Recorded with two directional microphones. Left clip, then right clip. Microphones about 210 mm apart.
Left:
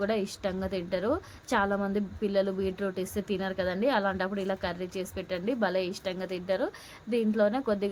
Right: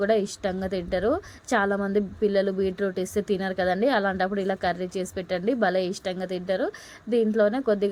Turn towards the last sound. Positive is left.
turn(degrees=-10)  # may be behind; listen again after turning